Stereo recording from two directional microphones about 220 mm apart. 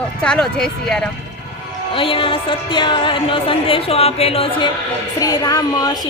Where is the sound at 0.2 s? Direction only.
5° left (ahead or behind).